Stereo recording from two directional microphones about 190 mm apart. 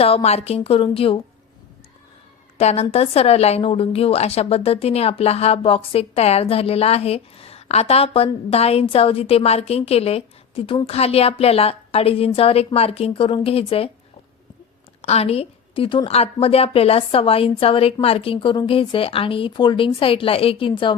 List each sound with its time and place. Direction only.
0.0 s a woman's voice: 30° left (ahead or behind)
2.6 s a woman's voice: 35° left (ahead or behind)
15.0 s a woman's voice: 30° left (ahead or behind)